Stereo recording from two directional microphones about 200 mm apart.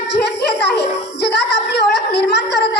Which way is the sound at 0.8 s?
55° left (ahead or behind).